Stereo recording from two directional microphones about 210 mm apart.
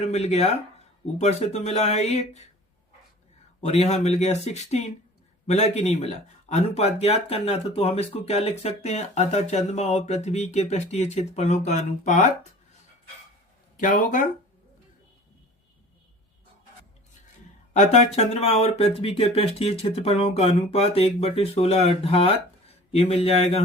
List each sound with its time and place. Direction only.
0.1 s speech: 30° left (ahead or behind)
3.6 s speech: 30° left (ahead or behind)
13.7 s speech: 40° left (ahead or behind)
17.7 s speech: 30° left (ahead or behind)